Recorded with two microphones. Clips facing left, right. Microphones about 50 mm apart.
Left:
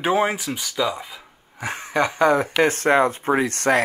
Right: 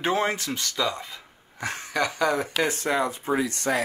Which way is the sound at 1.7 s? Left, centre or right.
Left.